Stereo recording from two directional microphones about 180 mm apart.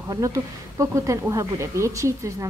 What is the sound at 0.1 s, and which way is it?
Speech, 20° right (ahead or behind).